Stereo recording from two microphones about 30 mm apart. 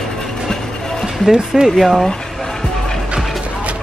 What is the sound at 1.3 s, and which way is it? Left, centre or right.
Speech, centre.